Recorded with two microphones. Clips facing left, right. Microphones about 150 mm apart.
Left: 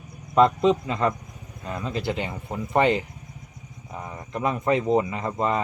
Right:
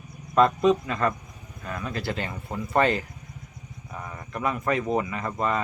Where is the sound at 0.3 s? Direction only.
20° left (ahead or behind).